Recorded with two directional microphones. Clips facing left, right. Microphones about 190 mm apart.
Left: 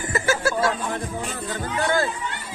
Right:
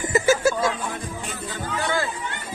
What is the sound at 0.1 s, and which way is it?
Music, 15° right (ahead or behind).